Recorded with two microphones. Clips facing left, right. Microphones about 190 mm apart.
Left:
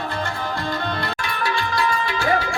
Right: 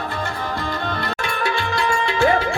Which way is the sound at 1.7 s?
25° right (ahead or behind).